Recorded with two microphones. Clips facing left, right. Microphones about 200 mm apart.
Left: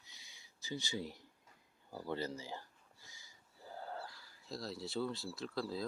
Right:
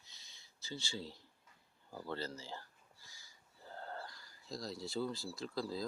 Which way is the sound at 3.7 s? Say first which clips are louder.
Left 1 dB; 5° left (ahead or behind).